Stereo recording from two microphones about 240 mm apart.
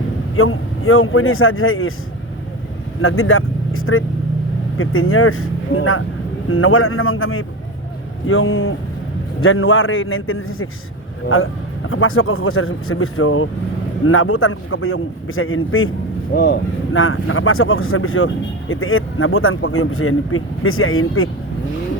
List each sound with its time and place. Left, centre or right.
0.3 s speech: left
3.0 s speech: left
16.3 s speech: left